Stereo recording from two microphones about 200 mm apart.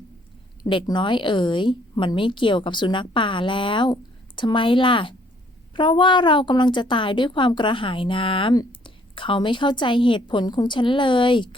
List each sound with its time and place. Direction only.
0.6 s a woman's voice: 20° left (ahead or behind)